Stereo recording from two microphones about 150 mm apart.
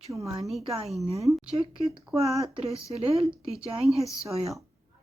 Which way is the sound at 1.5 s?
35° right (ahead or behind).